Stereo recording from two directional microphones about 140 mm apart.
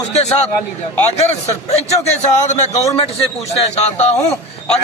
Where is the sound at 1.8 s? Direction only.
50° left (ahead or behind).